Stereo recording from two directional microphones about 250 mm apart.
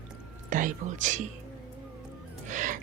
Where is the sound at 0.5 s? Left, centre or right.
Right.